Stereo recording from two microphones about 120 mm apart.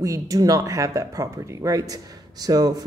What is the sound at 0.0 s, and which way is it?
Speech, 30° right (ahead or behind).